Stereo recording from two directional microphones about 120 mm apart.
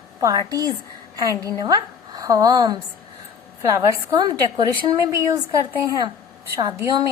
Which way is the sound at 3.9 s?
30° right (ahead or behind).